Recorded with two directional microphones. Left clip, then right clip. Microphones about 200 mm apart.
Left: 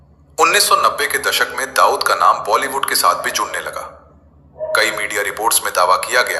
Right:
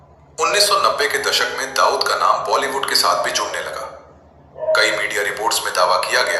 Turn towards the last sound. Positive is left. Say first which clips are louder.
# left 2 dB
turn(degrees=60)  # may be behind; listen again after turning